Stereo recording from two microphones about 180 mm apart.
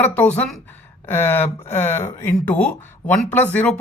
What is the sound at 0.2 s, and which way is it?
A woman's voice, 10° left (ahead or behind).